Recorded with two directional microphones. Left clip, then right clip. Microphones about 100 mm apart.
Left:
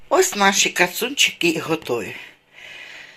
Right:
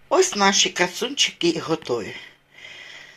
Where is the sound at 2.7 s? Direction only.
15° left (ahead or behind).